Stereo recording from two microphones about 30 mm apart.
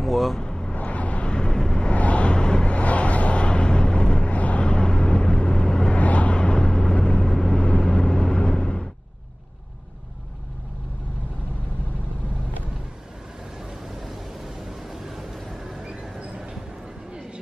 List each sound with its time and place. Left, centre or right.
0.0 s speech: centre
0.4 s vehicle: left
0.7 s vehicle: left
1.5 s vehicle: left
2.0 s vehicle: left
2.7 s vehicle: left
4.3 s vehicle: left
5.9 s vehicle: left
6.3 s vehicle: left; by 7.6 s centre
7.6 s vehicle: left
13.8 s a sound: centre
14.6 s vehicle: centre
15.5 s a sound: centre
15.8 s vehicle: right